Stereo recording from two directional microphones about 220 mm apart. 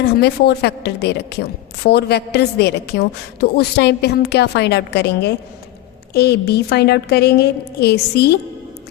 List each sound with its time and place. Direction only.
0.1 s a woman's voice: 50° left (ahead or behind)